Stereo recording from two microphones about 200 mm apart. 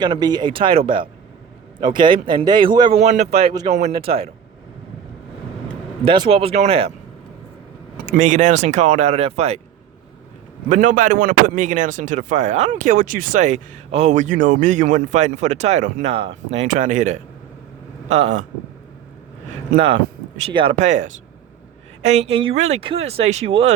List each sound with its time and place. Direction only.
0.0 s speech: 20° right (ahead or behind)
3.7 s speech: 35° right (ahead or behind)
6.1 s speech: 25° right (ahead or behind)
8.0 s speech: 40° right (ahead or behind)
10.7 s speech: 40° right (ahead or behind)
19.7 s speech: 30° right (ahead or behind)
20.7 s speech: 35° right (ahead or behind)